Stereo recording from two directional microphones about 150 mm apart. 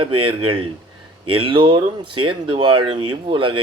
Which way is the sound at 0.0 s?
35° right (ahead or behind).